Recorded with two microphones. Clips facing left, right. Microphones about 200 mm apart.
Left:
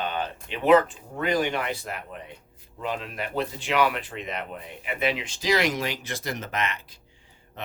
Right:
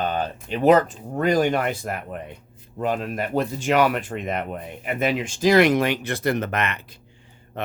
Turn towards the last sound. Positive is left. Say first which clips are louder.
# right 4 dB
turn(degrees=-60)  # may be behind; listen again after turning